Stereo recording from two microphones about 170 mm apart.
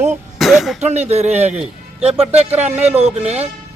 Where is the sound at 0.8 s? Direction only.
40° right (ahead or behind).